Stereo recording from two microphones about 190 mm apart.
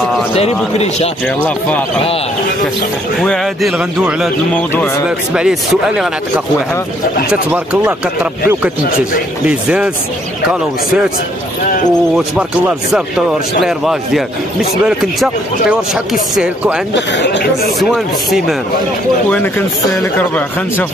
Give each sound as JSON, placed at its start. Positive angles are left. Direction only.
{"t": 0.3, "sound": "a man's voice", "side_deg": 35}
{"t": 3.2, "sound": "speech", "side_deg": 0}
{"t": 4.6, "sound": "a man's voice", "side_deg": 5}
{"t": 5.3, "sound": "speech", "side_deg": -5}
{"t": 7.5, "sound": "speech", "side_deg": -10}
{"t": 13.6, "sound": "speech", "side_deg": 0}
{"t": 16.9, "sound": "speech", "side_deg": 70}
{"t": 17.7, "sound": "speech", "side_deg": 0}
{"t": 19.2, "sound": "a man's voice", "side_deg": 10}